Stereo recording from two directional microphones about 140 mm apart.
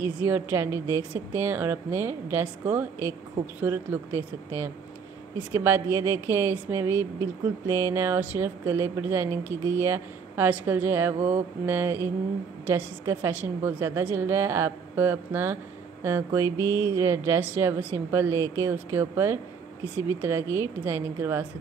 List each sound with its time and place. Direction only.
0.0 s a woman's voice: 15° right (ahead or behind)